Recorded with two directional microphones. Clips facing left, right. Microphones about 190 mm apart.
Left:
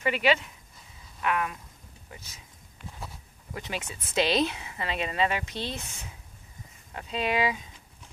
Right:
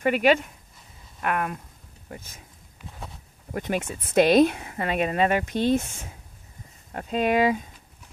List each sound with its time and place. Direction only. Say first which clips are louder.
0.0 s speech: right 5 dB; 50° right (ahead or behind)
3.5 s speech: right 8 dB; 50° right (ahead or behind)